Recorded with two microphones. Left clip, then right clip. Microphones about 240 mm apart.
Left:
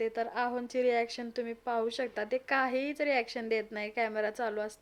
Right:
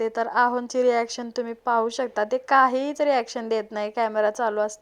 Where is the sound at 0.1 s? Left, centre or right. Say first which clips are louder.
Right 11 dB; right.